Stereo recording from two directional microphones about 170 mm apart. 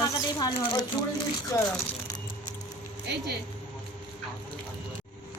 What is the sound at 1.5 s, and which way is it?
Speech, 20° left (ahead or behind).